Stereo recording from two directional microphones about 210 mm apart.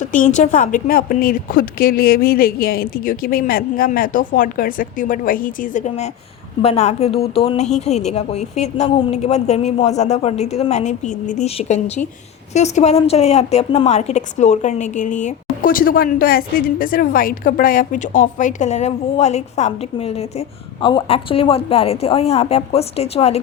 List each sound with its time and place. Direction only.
0.1 s a woman's voice: 35° left (ahead or behind)